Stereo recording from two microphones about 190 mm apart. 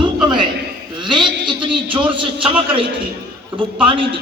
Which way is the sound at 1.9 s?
25° right (ahead or behind).